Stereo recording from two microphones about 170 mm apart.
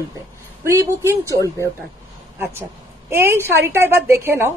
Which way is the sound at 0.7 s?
15° right (ahead or behind).